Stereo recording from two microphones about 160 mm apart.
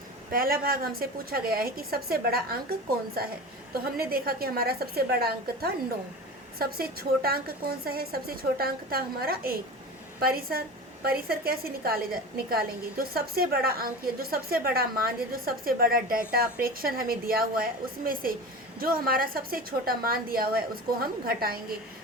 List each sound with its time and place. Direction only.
0.3 s a woman's voice: 65° right (ahead or behind)
3.9 s a woman's voice: 70° right (ahead or behind)